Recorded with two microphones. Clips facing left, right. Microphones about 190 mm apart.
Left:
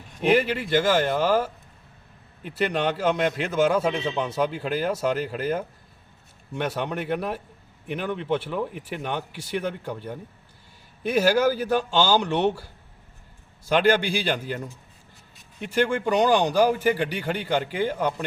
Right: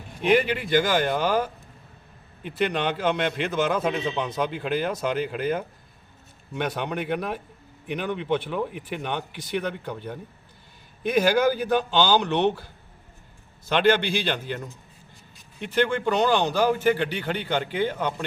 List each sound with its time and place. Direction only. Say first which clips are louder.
0.3 s a man's voice: even; 5° left (ahead or behind)